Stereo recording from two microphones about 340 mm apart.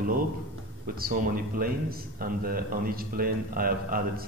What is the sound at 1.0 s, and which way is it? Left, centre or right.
Speech, right.